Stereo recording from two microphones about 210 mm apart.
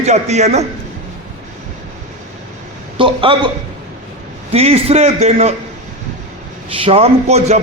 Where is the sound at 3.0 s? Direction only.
25° right (ahead or behind).